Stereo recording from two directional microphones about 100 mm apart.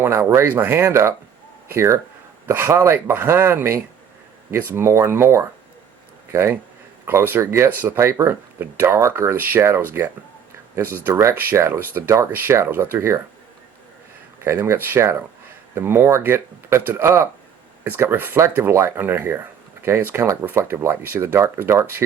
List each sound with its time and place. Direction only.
0.0 s speech: 25° right (ahead or behind)
14.4 s speech: 25° right (ahead or behind)